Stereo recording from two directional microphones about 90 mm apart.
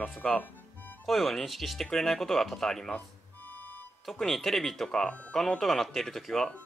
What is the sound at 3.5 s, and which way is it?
Music, 20° left (ahead or behind).